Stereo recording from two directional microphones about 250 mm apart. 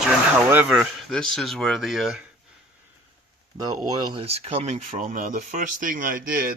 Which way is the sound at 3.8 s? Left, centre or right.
Centre.